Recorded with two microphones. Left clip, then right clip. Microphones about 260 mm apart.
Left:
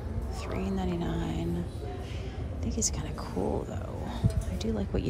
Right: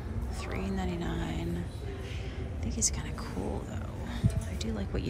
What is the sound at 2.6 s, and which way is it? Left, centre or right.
A woman's voice, centre.